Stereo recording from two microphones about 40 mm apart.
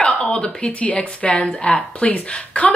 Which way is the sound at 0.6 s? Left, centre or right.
Left.